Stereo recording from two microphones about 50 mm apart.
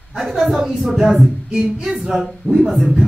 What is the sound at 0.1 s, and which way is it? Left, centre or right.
Speech, centre.